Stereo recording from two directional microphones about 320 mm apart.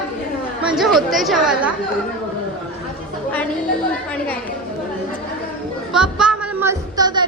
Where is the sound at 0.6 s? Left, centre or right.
Centre.